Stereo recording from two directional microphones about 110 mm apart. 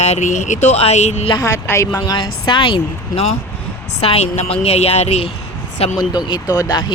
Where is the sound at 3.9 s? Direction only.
70° left (ahead or behind).